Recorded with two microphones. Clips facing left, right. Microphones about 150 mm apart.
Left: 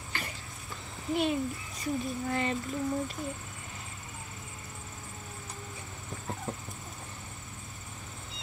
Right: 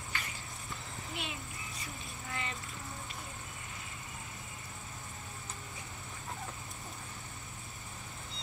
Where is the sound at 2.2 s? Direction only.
40° left (ahead or behind).